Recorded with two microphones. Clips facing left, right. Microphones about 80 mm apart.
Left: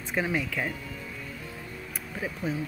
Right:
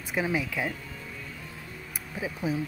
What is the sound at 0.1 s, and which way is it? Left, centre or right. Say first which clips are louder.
Speech: even; centre.